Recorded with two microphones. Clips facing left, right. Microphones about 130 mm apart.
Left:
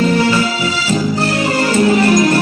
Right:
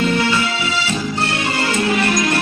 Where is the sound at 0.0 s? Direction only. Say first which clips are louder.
Left 4 dB; 30° left (ahead or behind).